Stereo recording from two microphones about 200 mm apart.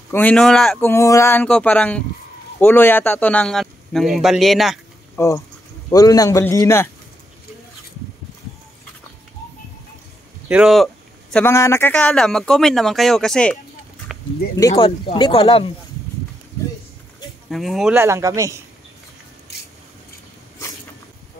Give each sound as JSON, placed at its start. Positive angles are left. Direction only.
{"t": 0.1, "sound": "a man's voice", "side_deg": 5}
{"t": 5.9, "sound": "speech", "side_deg": 15}
{"t": 10.5, "sound": "speech", "side_deg": -5}
{"t": 11.3, "sound": "speech", "side_deg": 15}
{"t": 14.1, "sound": "a sound", "side_deg": -5}
{"t": 14.6, "sound": "speech", "side_deg": 15}
{"t": 17.5, "sound": "speech", "side_deg": 0}
{"t": 18.0, "sound": "speech", "side_deg": -15}